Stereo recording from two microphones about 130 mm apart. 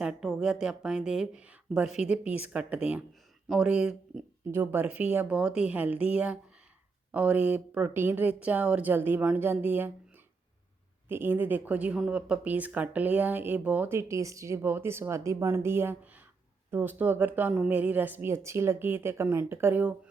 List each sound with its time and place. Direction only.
0.0 s speech: 5° right (ahead or behind)
11.1 s speech: 15° right (ahead or behind)